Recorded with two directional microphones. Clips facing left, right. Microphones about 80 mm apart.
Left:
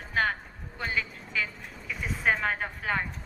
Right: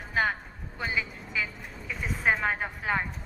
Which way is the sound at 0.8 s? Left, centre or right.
Centre.